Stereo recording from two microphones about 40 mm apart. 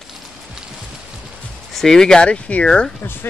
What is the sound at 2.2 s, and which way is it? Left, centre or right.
Speech, left.